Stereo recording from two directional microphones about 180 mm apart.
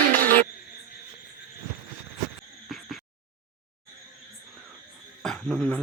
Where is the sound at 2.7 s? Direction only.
Centre (ahead or behind).